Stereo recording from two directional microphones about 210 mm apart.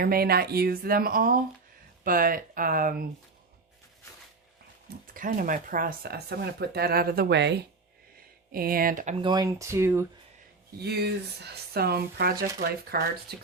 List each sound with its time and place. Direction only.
0.0 s speech: 45° right (ahead or behind)
5.1 s speech: 40° right (ahead or behind)
9.2 s speech: 20° right (ahead or behind)
10.8 s speech: 50° right (ahead or behind)